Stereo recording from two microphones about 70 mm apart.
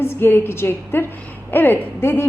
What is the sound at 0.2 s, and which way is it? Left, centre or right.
A woman's voice, left.